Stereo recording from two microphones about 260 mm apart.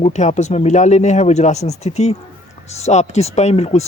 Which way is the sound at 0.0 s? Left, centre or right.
Left.